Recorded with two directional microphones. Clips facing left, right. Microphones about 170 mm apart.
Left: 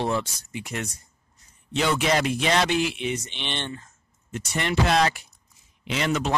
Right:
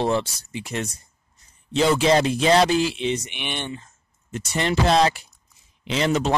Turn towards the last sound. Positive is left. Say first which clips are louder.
# right 4 dB
turn(degrees=-30)  # may be behind; listen again after turning